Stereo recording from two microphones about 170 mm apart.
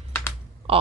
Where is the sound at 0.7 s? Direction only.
35° right (ahead or behind).